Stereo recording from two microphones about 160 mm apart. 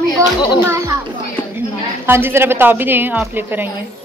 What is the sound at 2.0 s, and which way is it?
A woman's voice, 15° right (ahead or behind).